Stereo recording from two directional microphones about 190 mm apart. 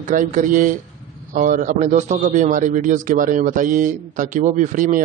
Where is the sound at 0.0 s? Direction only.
45° right (ahead or behind).